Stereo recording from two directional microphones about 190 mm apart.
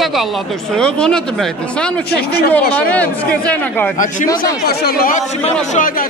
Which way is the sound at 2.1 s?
55° left (ahead or behind).